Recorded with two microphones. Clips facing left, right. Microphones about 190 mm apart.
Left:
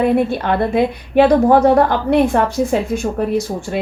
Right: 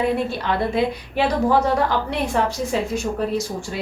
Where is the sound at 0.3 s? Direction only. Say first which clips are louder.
Left 5 dB; 55° left (ahead or behind).